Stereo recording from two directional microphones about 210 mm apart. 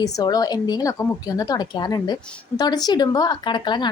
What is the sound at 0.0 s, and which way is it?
A woman's voice, 15° left (ahead or behind).